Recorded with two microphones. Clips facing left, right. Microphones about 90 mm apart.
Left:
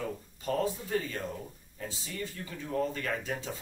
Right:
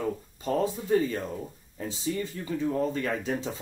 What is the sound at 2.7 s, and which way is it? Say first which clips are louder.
Speech: left 1 dB; 20° right (ahead or behind).